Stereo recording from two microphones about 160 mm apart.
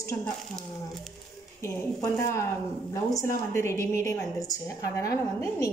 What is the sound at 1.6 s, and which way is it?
A woman's voice, 15° left (ahead or behind).